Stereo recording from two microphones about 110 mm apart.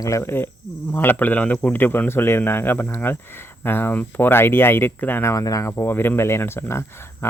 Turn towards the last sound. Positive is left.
turn(degrees=20)  # may be behind; listen again after turning